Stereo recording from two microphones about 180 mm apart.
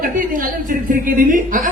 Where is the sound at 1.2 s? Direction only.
50° right (ahead or behind).